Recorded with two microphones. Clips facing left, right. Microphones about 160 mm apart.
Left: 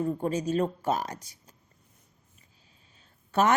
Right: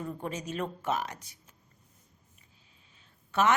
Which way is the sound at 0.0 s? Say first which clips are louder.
Left 8 dB; 35° left (ahead or behind).